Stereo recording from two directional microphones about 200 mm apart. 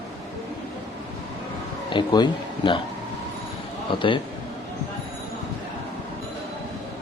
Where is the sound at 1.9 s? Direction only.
20° left (ahead or behind).